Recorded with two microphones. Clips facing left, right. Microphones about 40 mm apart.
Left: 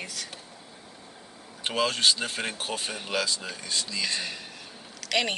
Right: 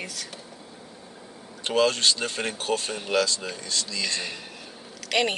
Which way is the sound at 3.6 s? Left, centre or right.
Centre.